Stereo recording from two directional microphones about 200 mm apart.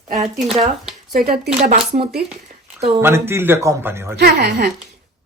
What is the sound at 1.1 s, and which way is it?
Speech, 50° right (ahead or behind).